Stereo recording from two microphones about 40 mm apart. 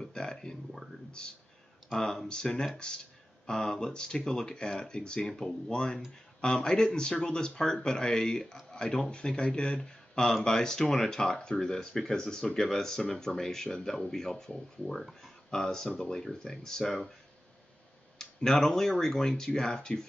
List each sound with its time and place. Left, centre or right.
0.0 s speech: centre
1.9 s speech: centre
2.2 s speech: centre
5.2 s speech: centre
18.1 s speech: centre